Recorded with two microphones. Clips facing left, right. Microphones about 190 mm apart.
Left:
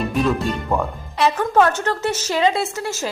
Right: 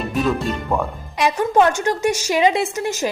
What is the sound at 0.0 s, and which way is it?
Speech, centre (ahead or behind).